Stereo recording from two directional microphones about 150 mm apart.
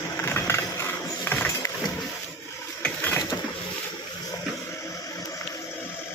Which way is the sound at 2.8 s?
10° left (ahead or behind).